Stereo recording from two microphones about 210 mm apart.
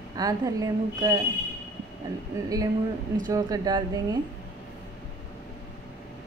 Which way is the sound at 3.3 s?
20° right (ahead or behind).